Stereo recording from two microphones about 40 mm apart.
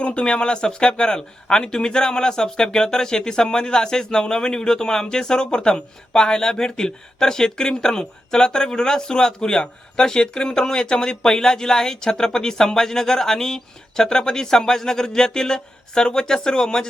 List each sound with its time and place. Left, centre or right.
0.0 s speech: left